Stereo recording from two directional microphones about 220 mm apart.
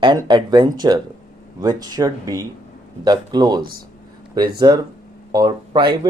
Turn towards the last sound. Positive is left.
turn(degrees=-20)  # may be behind; listen again after turning